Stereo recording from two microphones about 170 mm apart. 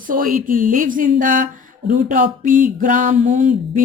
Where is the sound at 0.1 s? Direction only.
55° right (ahead or behind).